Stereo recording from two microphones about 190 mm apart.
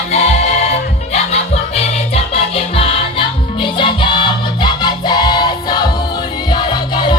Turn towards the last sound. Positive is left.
turn(degrees=20)  # may be behind; listen again after turning